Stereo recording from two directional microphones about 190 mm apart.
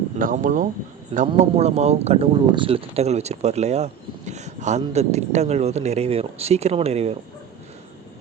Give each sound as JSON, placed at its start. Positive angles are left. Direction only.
{"t": 0.2, "sound": "speech", "side_deg": -45}